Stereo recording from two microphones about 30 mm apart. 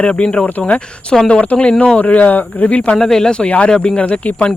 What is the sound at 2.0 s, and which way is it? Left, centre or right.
Speech, left.